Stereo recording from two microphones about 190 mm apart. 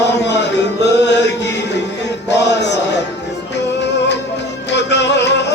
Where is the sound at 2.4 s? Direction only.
65° left (ahead or behind).